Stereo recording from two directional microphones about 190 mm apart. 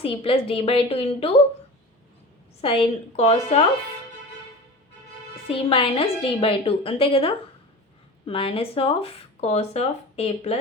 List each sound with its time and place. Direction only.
0.0 s speech: 30° left (ahead or behind)
2.6 s speech: 30° left (ahead or behind)
5.5 s a woman's voice: 30° left (ahead or behind)